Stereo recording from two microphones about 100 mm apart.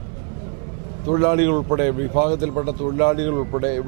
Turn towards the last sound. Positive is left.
turn(degrees=-20)  # may be behind; listen again after turning